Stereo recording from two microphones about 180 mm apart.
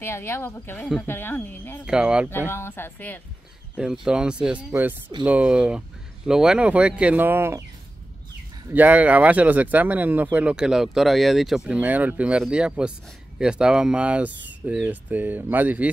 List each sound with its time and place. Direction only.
0.0 s speech: 15° left (ahead or behind)
1.9 s speech: 5° right (ahead or behind)
2.5 s speech: 15° left (ahead or behind)
3.7 s speech: 5° right (ahead or behind)
8.6 s speech: 10° right (ahead or behind)